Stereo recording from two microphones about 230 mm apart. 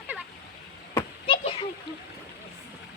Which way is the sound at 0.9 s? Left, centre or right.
Left.